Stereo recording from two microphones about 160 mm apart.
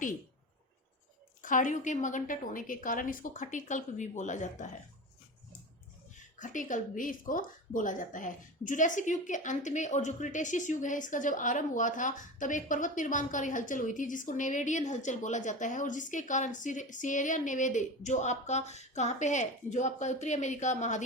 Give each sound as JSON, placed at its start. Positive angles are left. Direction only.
{"t": 1.4, "sound": "speech", "side_deg": 55}
{"t": 6.4, "sound": "speech", "side_deg": 55}